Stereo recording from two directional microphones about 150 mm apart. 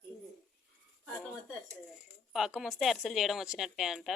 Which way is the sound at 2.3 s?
Centre (ahead or behind).